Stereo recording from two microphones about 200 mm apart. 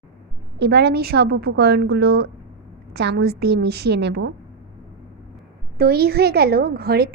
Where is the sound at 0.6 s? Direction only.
55° right (ahead or behind).